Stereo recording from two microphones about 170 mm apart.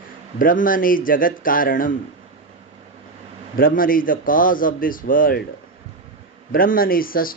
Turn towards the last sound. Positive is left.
turn(degrees=55)  # may be behind; listen again after turning